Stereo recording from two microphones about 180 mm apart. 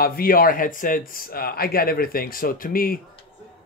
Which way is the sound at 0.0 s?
55° left (ahead or behind).